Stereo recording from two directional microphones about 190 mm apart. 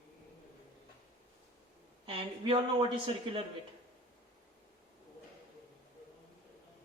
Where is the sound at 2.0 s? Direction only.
25° right (ahead or behind).